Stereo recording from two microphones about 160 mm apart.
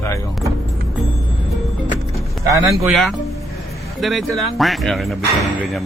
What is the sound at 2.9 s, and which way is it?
Speech, centre (ahead or behind).